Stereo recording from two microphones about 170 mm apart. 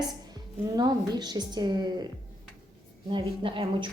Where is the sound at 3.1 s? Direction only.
30° right (ahead or behind).